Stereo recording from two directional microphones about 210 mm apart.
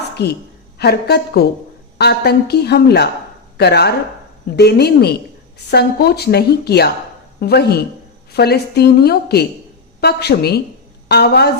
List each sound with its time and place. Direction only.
0.2 s a woman's voice: 50° left (ahead or behind)